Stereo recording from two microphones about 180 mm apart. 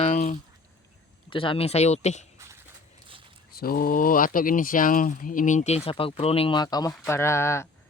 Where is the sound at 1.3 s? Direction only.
30° left (ahead or behind).